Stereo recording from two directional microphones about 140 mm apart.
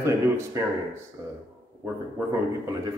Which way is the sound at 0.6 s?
25° right (ahead or behind).